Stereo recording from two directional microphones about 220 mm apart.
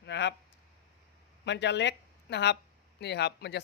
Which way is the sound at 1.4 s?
50° left (ahead or behind).